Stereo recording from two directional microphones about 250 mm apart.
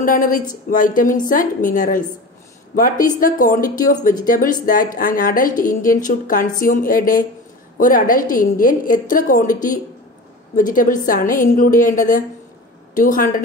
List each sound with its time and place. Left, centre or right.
0.0 s a woman's voice: left